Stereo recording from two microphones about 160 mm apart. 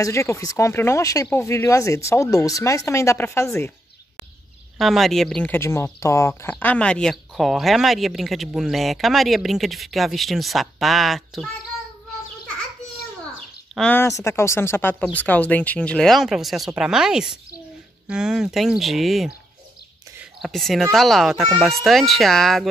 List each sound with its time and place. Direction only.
0.0 s speech: 20° left (ahead or behind)
4.7 s speech: centre (ahead or behind)
13.7 s speech: 10° left (ahead or behind)
20.4 s speech: centre (ahead or behind)